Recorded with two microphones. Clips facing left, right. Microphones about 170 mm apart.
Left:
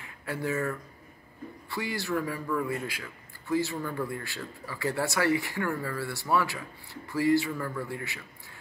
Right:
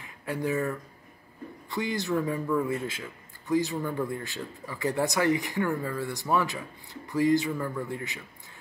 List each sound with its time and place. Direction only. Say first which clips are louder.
0.0 s a man's voice: right 2 dB; 15° right (ahead or behind)